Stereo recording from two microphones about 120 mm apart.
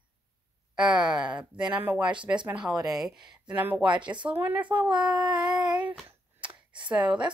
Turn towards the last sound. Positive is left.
turn(degrees=-10)  # may be behind; listen again after turning